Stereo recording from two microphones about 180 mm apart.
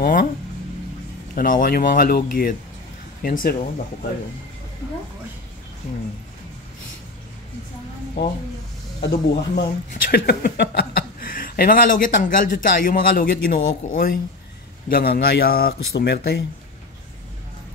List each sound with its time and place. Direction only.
0.0 s a man's voice: 55° left (ahead or behind)
1.3 s speech: 50° left (ahead or behind)
9.1 s a man's voice: 55° left (ahead or behind)